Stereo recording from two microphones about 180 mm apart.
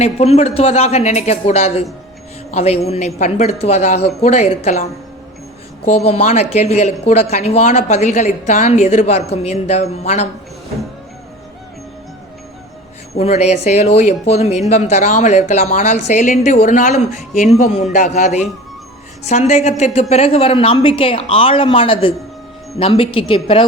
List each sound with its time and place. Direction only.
0.0 s a woman's voice: 35° left (ahead or behind)
13.1 s a woman's voice: 35° left (ahead or behind)